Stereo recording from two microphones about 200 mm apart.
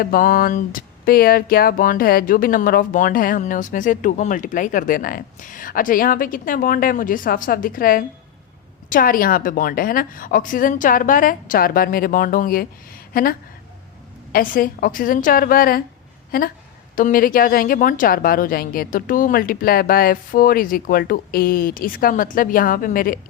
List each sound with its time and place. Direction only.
0.0 s speech: 45° left (ahead or behind)
14.3 s speech: 45° left (ahead or behind)